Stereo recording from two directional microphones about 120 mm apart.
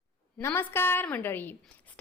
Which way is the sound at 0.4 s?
20° left (ahead or behind).